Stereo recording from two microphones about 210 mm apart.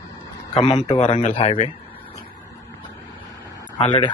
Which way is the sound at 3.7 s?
25° left (ahead or behind).